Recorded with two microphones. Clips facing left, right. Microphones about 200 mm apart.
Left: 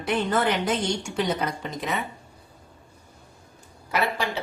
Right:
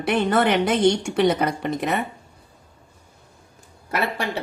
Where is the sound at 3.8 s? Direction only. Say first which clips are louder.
Right 1 dB; 60° right (ahead or behind).